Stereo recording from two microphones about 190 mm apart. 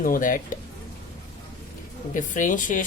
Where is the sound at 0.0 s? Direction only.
45° left (ahead or behind).